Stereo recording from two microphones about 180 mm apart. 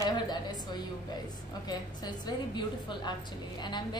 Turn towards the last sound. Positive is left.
turn(degrees=25)  # may be behind; listen again after turning